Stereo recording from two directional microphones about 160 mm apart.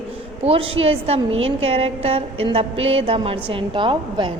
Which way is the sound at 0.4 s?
35° right (ahead or behind).